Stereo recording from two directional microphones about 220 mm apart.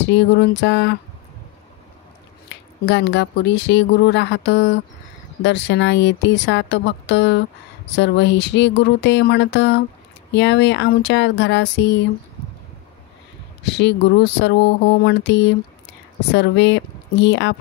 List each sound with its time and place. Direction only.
0.0 s speech: 50° left (ahead or behind)
2.5 s speech: 50° left (ahead or behind)
13.7 s speech: 50° left (ahead or behind)